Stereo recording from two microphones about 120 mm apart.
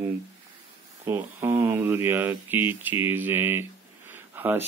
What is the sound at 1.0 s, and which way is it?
Speech, 20° right (ahead or behind).